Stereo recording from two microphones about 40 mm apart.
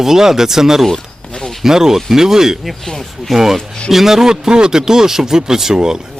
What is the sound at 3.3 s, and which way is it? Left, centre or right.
Speech, centre.